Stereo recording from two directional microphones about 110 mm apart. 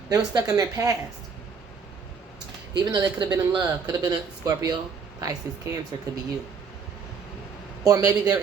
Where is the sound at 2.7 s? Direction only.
40° right (ahead or behind).